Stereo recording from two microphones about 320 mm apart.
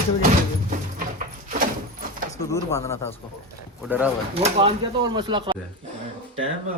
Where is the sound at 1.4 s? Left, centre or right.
Right.